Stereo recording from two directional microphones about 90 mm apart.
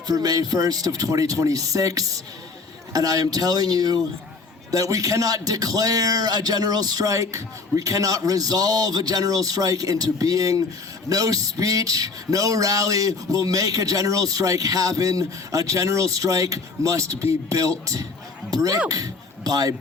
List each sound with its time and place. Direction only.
0.1 s a man's voice: 45° right (ahead or behind)